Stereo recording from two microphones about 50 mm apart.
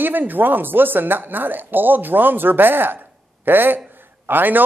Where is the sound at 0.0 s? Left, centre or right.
Right.